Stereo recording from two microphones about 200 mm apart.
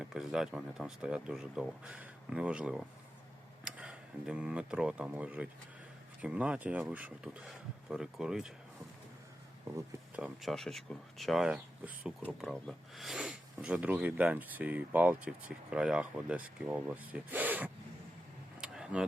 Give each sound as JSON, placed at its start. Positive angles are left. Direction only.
{"t": 0.0, "sound": "speech", "side_deg": 0}
{"t": 10.2, "sound": "speech", "side_deg": 0}
{"t": 18.6, "sound": "a sound", "side_deg": -5}